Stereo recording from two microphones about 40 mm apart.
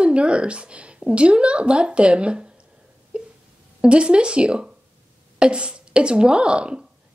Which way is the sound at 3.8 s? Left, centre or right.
Right.